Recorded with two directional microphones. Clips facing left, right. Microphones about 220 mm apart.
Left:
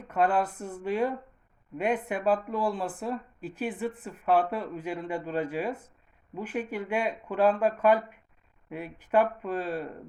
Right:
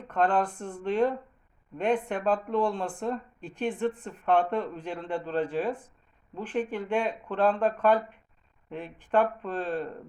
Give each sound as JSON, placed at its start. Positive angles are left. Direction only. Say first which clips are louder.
{"t": 0.1, "sound": "speech", "louder": "even", "side_deg": 5}